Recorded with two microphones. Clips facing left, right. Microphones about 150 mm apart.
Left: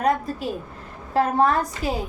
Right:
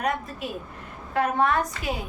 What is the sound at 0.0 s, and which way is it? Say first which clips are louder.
A woman's voice: left 6 dB; 35° left (ahead or behind).